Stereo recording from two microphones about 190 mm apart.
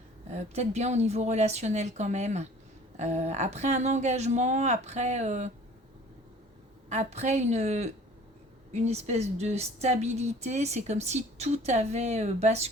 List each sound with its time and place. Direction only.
0.3 s a woman's voice: 35° right (ahead or behind)
6.9 s a woman's voice: 35° right (ahead or behind)